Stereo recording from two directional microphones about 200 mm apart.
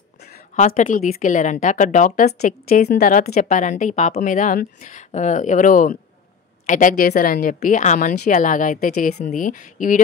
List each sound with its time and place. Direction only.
0.6 s speech: 40° left (ahead or behind)